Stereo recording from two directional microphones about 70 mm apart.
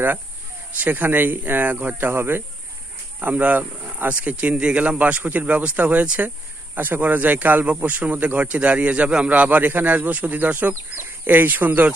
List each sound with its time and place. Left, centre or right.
0.7 s speech: right